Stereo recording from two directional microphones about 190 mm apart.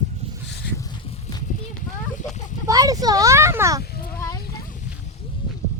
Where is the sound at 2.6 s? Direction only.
20° right (ahead or behind).